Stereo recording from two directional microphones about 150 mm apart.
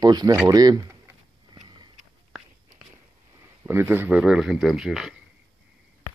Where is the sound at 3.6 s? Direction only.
15° right (ahead or behind).